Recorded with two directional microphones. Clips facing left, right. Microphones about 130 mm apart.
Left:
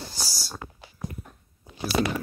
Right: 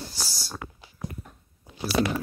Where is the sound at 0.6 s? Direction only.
90° right.